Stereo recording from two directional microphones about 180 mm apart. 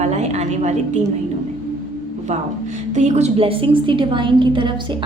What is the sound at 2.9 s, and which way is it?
A woman's voice, 40° right (ahead or behind).